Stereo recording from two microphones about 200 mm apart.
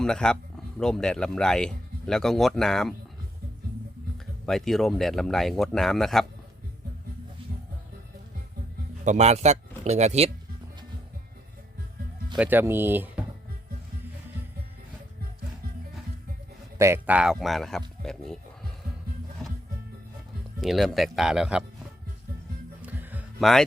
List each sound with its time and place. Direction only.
0.0 s speech: 5° left (ahead or behind)
4.4 s speech: centre (ahead or behind)
9.0 s speech: 35° right (ahead or behind)
12.4 s speech: 10° right (ahead or behind)
16.7 s speech: 15° right (ahead or behind); by 18.3 s centre (ahead or behind)
20.6 s speech: centre (ahead or behind)
22.8 s music: 10° right (ahead or behind)
23.4 s speech: centre (ahead or behind)